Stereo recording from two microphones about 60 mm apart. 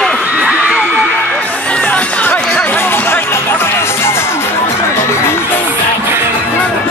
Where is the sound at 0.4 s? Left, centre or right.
Centre.